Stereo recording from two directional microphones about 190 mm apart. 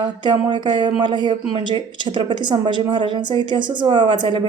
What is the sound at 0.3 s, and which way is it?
Speech, 25° right (ahead or behind).